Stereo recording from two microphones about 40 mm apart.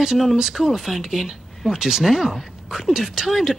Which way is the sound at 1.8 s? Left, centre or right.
Centre.